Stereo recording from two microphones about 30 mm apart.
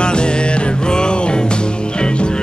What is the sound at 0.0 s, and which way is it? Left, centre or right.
Music, left.